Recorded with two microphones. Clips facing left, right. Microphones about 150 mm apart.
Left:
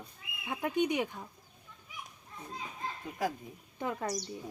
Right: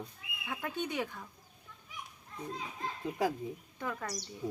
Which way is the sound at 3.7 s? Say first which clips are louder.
Left 7 dB; 20° left (ahead or behind).